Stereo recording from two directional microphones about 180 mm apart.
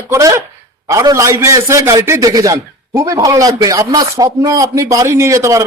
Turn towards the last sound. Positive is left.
turn(degrees=-15)  # may be behind; listen again after turning